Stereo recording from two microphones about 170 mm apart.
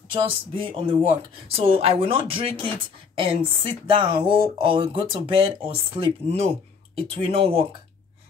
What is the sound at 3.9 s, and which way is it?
Speech, 30° right (ahead or behind).